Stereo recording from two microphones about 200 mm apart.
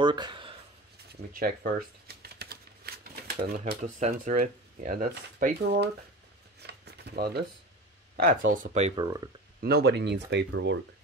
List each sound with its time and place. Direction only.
0.0 s a sound: 20° right (ahead or behind)
1.3 s shuffling cards: 45° right (ahead or behind)
3.8 s speech: 35° right (ahead or behind); by 5.9 s 55° right (ahead or behind)
6.6 s a sound: 55° right (ahead or behind)
8.2 s speech: 45° right (ahead or behind)
9.0 s speech: 20° right (ahead or behind)
9.6 s speech: 50° right (ahead or behind)